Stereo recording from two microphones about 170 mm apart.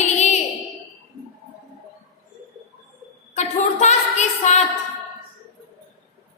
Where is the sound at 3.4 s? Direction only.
40° left (ahead or behind).